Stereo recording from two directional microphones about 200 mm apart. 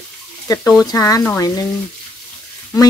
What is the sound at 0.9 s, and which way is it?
Speech, 15° left (ahead or behind).